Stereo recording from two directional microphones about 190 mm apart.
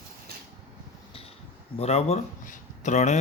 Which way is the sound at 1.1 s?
30° left (ahead or behind).